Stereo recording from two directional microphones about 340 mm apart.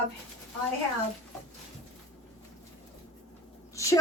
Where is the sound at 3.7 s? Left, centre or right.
Centre.